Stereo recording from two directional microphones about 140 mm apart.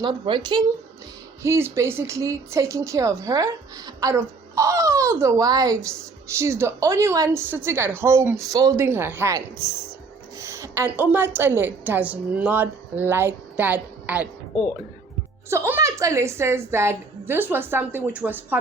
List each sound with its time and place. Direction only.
0.0 s a woman's voice: 35° right (ahead or behind)
1.4 s speech: 20° right (ahead or behind)
10.3 s a sound: 20° right (ahead or behind)
11.3 s a woman's voice: 15° right (ahead or behind)
15.4 s a woman's voice: 15° right (ahead or behind)